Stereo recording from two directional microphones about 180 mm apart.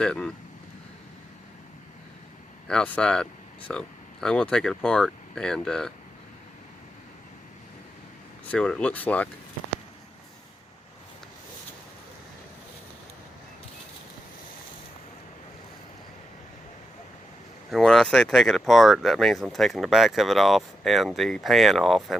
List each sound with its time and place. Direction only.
0.0 s speech: 5° left (ahead or behind)
2.6 s speech: 5° left (ahead or behind)
8.4 s speech: 5° left (ahead or behind)
17.7 s speech: centre (ahead or behind)